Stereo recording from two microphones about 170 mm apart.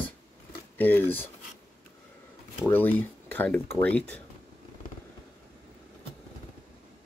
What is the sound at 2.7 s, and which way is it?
Speech, 10° left (ahead or behind).